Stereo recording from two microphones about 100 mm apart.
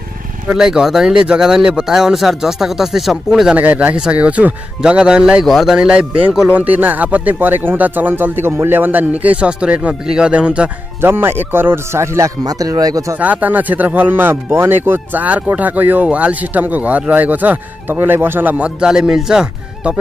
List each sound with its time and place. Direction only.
0.5 s speech: 5° right (ahead or behind)
11.0 s speech: 25° right (ahead or behind)
13.2 s speech: 15° right (ahead or behind)